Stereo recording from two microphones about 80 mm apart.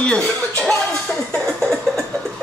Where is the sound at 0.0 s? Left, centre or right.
Centre.